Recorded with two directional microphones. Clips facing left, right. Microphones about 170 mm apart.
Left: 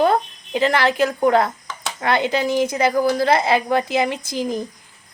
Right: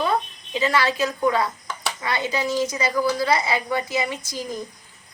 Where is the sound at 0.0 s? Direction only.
55° left (ahead or behind).